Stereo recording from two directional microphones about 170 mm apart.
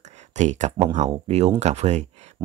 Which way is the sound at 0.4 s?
45° right (ahead or behind).